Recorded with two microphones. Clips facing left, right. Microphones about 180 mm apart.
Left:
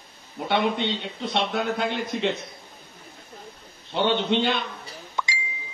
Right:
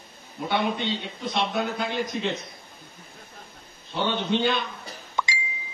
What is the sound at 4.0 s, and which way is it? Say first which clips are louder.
Speech: left 3 dB; 70° left (ahead or behind).